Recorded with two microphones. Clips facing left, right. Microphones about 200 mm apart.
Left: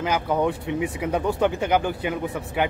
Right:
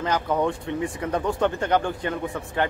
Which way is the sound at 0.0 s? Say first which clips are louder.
Left 1 dB; 10° left (ahead or behind).